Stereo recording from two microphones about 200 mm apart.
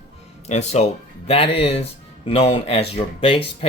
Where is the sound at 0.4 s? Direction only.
35° left (ahead or behind).